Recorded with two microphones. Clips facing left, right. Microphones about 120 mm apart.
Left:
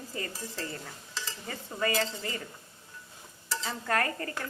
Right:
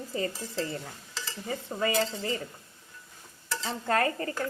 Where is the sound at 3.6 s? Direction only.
25° right (ahead or behind).